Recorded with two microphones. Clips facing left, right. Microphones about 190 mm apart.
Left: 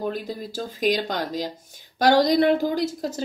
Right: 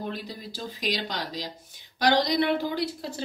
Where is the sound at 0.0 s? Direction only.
45° left (ahead or behind).